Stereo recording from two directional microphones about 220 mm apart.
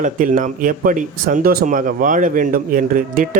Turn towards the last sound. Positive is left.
turn(degrees=-40)  # may be behind; listen again after turning